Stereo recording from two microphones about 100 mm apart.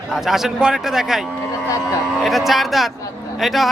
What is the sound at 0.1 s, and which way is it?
A man's voice, 5° right (ahead or behind).